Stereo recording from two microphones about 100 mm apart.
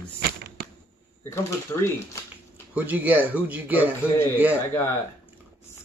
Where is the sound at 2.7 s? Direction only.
15° right (ahead or behind).